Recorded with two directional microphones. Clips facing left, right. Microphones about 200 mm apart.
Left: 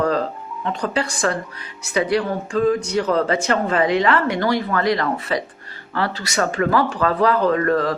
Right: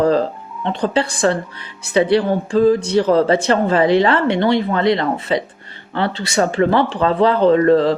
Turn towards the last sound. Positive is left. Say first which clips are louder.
# right 6 dB
turn(degrees=-25)  # may be behind; listen again after turning